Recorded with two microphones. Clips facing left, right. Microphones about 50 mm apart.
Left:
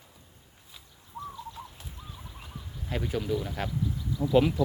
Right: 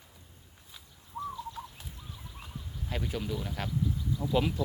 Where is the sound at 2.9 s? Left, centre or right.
Centre.